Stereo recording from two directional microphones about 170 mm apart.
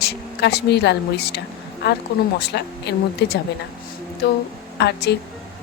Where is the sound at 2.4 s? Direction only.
80° left.